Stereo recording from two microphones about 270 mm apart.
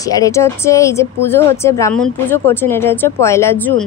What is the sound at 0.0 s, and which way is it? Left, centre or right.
A woman's voice, centre.